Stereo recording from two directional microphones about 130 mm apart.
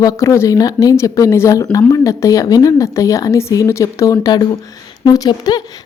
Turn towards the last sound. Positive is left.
turn(degrees=30)  # may be behind; listen again after turning